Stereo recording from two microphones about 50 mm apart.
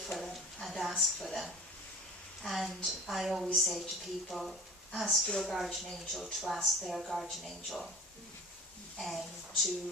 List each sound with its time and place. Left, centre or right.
0.2 s a sound: centre
2.4 s a woman's voice: centre
5.9 s speech: centre
6.4 s a woman's voice: centre
9.0 s a woman's voice: centre